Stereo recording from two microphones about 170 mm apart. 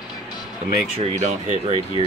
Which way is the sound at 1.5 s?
35° right (ahead or behind).